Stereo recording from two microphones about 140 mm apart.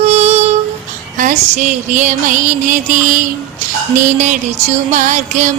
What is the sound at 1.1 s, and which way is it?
Music, 65° right (ahead or behind).